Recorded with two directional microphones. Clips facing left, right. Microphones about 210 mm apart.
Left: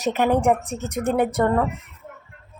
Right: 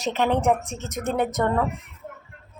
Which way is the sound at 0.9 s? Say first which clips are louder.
Left 4 dB; 35° left (ahead or behind).